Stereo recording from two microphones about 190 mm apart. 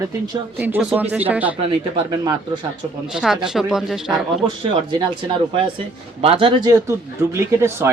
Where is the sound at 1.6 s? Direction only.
30° right (ahead or behind).